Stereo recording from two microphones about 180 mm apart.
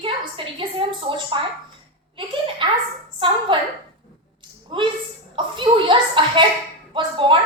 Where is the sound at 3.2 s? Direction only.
30° right (ahead or behind).